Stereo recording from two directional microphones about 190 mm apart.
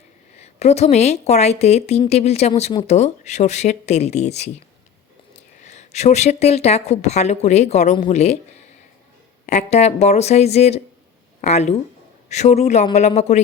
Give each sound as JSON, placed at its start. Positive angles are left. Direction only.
{"t": 0.4, "sound": "speech", "side_deg": 35}
{"t": 5.6, "sound": "speech", "side_deg": 35}
{"t": 9.5, "sound": "speech", "side_deg": 35}